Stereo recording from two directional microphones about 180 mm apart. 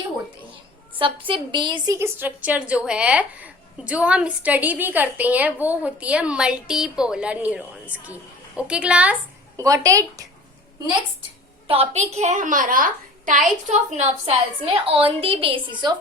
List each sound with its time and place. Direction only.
0.9 s a woman's voice: 30° right (ahead or behind)
2.0 s a woman's voice: 10° right (ahead or behind)
9.6 s a woman's voice: 20° right (ahead or behind)
11.7 s a woman's voice: 35° right (ahead or behind)